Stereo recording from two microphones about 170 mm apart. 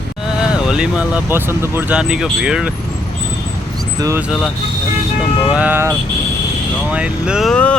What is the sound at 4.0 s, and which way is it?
Speech, 20° right (ahead or behind).